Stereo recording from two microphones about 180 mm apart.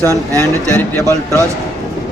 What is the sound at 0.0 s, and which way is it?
Speech, 15° right (ahead or behind).